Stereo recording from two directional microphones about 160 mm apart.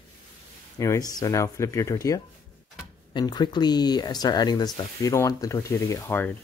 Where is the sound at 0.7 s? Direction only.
20° left (ahead or behind).